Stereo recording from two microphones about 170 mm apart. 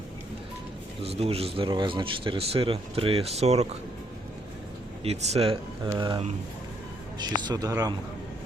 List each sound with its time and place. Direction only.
1.0 s speech: 35° right (ahead or behind)
5.0 s speech: 40° right (ahead or behind); by 7.9 s 20° right (ahead or behind)